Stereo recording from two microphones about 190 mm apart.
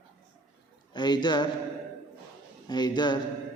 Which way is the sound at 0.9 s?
20° left (ahead or behind).